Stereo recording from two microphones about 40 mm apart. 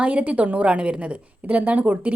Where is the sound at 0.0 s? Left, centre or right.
Right.